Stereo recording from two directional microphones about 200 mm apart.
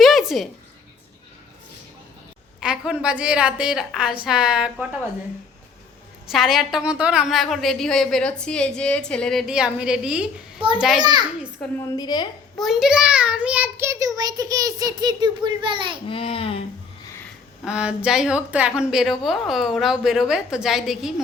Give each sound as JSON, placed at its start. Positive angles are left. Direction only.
{"t": 0.0, "sound": "a sound", "side_deg": 0}
{"t": 2.6, "sound": "a woman's voice", "side_deg": -5}
{"t": 6.3, "sound": "a woman's voice", "side_deg": 0}
{"t": 11.0, "sound": "a child's voice", "side_deg": -20}
{"t": 11.8, "sound": "speech", "side_deg": 20}
{"t": 12.5, "sound": "a child's voice", "side_deg": 0}
{"t": 16.0, "sound": "speech", "side_deg": 25}
{"t": 17.7, "sound": "a woman's voice", "side_deg": -5}